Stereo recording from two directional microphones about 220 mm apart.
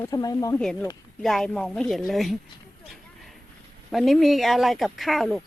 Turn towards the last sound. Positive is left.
turn(degrees=0)  # may be behind; listen again after turning